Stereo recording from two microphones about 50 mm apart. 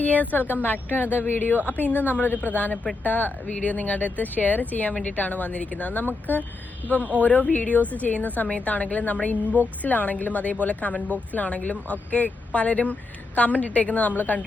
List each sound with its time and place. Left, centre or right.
0.0 s a woman's voice: left